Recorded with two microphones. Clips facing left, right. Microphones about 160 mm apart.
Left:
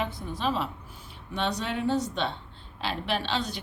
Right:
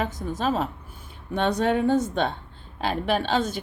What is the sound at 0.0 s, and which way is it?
A woman's voice, 45° right (ahead or behind).